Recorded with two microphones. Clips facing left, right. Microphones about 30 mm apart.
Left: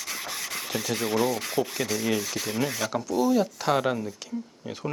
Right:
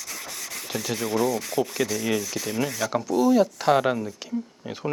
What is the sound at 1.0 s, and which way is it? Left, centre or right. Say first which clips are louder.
Speech: right 1 dB; left.